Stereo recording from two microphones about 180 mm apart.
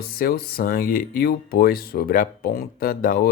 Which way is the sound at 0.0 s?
55° left (ahead or behind).